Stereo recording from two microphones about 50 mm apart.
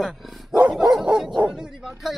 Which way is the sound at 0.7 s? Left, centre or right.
Centre.